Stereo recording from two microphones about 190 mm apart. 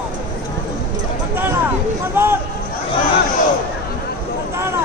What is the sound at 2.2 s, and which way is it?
Speech, 10° right (ahead or behind).